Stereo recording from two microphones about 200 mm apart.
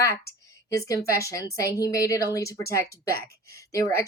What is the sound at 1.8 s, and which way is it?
Speech, 15° left (ahead or behind).